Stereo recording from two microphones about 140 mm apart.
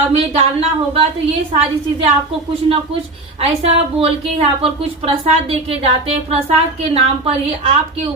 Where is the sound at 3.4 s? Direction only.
45° right (ahead or behind).